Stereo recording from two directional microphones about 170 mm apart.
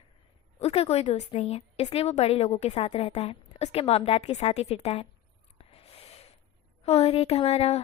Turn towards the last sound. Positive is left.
turn(degrees=35)  # may be behind; listen again after turning